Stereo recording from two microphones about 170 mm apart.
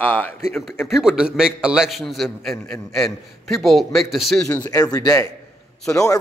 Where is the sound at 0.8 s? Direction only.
5° right (ahead or behind).